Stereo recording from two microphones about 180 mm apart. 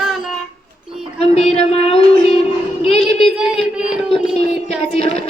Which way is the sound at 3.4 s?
5° right (ahead or behind).